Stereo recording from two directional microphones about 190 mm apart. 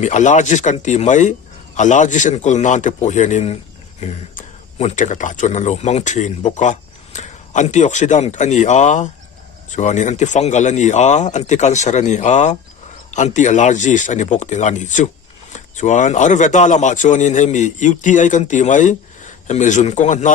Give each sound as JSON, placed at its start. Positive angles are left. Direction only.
{"t": 0.0, "sound": "speech", "side_deg": 40}